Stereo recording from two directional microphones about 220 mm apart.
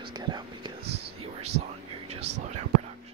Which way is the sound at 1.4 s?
30° right (ahead or behind).